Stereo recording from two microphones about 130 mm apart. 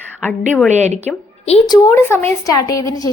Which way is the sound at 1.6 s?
30° left (ahead or behind).